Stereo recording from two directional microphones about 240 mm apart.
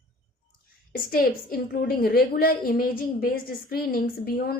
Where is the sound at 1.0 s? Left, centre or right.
Left.